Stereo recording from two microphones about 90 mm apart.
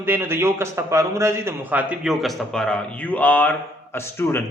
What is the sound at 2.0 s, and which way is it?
A man's voice, centre (ahead or behind).